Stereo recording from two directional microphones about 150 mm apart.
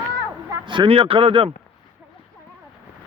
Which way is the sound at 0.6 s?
35° right (ahead or behind).